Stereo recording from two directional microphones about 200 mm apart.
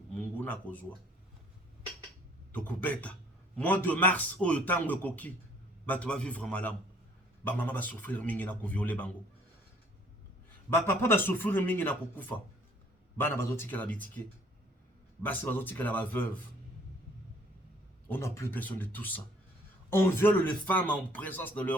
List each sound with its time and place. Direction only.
0.1 s speech: 5° left (ahead or behind)
2.5 s speech: 10° left (ahead or behind)
10.7 s speech: 10° left (ahead or behind)
15.2 s speech: 10° left (ahead or behind)
18.1 s speech: 15° left (ahead or behind)